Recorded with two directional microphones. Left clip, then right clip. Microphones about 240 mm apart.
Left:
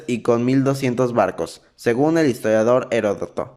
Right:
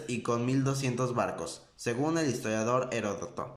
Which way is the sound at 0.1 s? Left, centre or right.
Left.